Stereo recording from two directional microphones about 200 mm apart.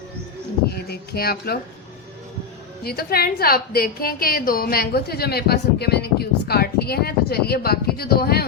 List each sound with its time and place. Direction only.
0.9 s a woman's voice: 50° left (ahead or behind)
2.8 s a woman's voice: 50° left (ahead or behind)